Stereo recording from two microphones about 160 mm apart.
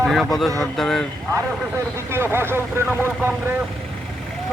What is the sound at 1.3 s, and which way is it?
Speech, 15° right (ahead or behind).